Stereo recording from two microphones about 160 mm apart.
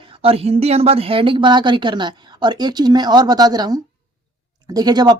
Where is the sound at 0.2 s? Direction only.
35° right (ahead or behind).